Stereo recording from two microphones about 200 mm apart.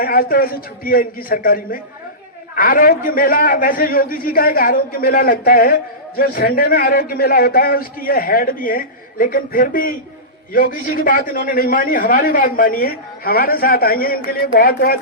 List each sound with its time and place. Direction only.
0.0 s a man's voice: 50° left (ahead or behind)